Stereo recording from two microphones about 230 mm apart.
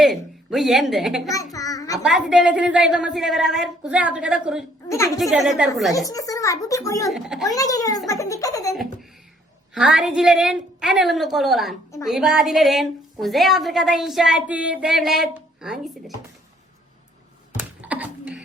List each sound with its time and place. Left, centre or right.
0.0 s a woman's voice: centre
1.5 s a child's voice: centre
2.0 s a woman's voice: centre
4.9 s a child's voice: centre
5.2 s a woman's voice: centre
6.1 s a child's voice: centre
7.1 s a woman's voice: centre
7.4 s a child's voice: centre
8.7 s a sound: centre
9.7 s a woman's voice: centre
17.5 s a sound: centre